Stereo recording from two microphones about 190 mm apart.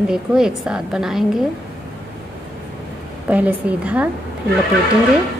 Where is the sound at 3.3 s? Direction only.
5° right (ahead or behind).